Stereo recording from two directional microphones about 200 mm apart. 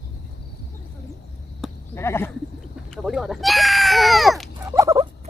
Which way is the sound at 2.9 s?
Centre (ahead or behind).